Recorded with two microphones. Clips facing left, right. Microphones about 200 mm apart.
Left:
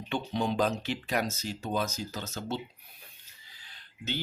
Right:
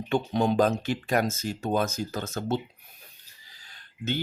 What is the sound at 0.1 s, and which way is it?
Speech, 45° right (ahead or behind).